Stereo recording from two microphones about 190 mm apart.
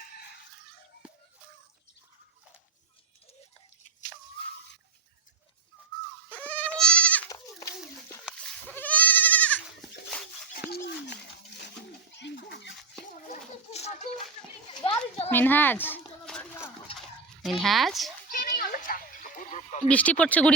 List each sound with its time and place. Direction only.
6.2 s goat: 10° left (ahead or behind)
7.3 s goat: 20° left (ahead or behind)
8.2 s goat: centre (ahead or behind)
12.1 s a sound: 60° left (ahead or behind)
13.2 s children playing: 35° left (ahead or behind)
14.7 s children playing: 25° left (ahead or behind)
15.3 s a sound: 10° left (ahead or behind)
17.4 s speech: centre (ahead or behind)
18.3 s a sound: 45° left (ahead or behind)
19.9 s speech: 5° left (ahead or behind)